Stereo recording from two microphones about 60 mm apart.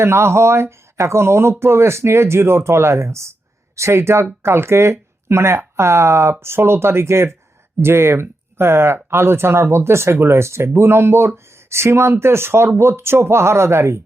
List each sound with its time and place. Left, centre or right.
0.0 s speech: right